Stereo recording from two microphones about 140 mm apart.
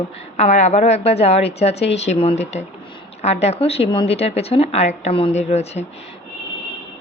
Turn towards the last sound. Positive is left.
turn(degrees=50)  # may be behind; listen again after turning